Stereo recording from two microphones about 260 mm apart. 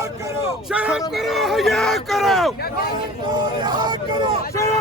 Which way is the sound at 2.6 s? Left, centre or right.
Left.